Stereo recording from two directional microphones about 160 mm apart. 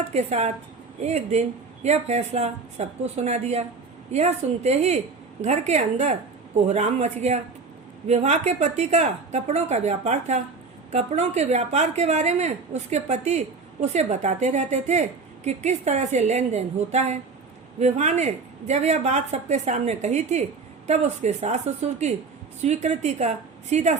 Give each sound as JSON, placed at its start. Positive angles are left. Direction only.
{"t": 0.1, "sound": "speech", "side_deg": -45}